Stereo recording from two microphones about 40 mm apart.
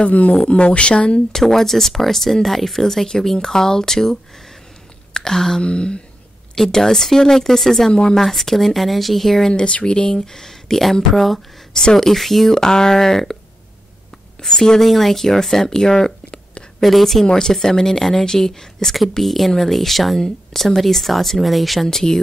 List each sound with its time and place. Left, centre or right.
0.5 s speech: left
1.3 s speech: centre
5.6 s speech: left
6.5 s speech: centre
7.9 s speech: centre
8.2 s speech: centre
9.5 s speech: left; by 11.4 s centre
11.7 s speech: centre
12.1 s speech: centre
12.5 s speech: centre
14.4 s speech: centre
14.8 s speech: centre
21.8 s speech: centre